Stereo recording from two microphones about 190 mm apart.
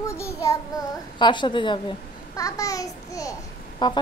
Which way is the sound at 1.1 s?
25° left (ahead or behind).